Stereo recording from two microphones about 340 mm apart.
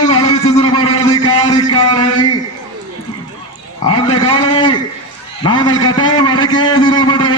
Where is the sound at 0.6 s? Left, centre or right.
Centre.